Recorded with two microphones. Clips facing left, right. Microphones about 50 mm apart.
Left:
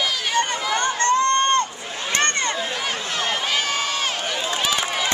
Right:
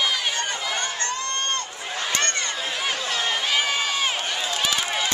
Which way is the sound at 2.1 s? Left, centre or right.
Left.